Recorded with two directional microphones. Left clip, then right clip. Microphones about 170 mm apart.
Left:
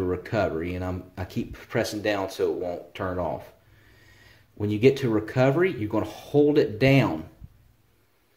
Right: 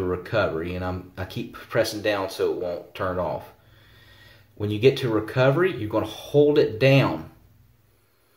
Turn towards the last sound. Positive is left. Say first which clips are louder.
# right 2 dB
turn(degrees=30)  # may be behind; listen again after turning